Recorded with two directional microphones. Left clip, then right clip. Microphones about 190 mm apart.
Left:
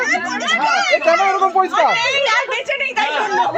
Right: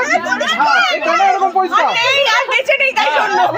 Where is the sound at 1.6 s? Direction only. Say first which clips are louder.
Right 1 dB; 60° left (ahead or behind).